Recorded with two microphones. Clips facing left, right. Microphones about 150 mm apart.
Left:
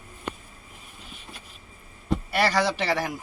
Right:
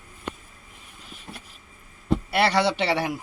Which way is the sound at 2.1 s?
25° right (ahead or behind).